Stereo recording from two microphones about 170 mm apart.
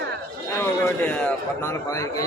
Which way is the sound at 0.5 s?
15° left (ahead or behind).